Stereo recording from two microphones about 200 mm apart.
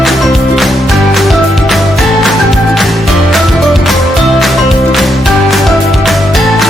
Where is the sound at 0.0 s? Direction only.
Centre (ahead or behind).